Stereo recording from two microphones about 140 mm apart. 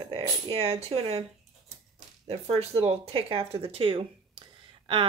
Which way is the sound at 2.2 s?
45° right (ahead or behind).